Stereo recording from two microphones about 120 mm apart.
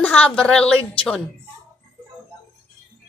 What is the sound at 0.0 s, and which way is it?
A woman's voice, 10° left (ahead or behind).